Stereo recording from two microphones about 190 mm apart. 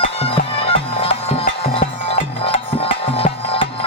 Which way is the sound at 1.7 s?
30° left (ahead or behind).